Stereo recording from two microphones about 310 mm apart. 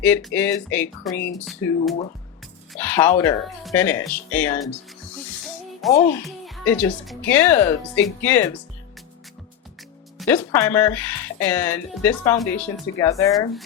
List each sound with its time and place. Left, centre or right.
0.0 s speech: centre
5.9 s a child's voice: left
6.1 s speech: centre
10.2 s speech: centre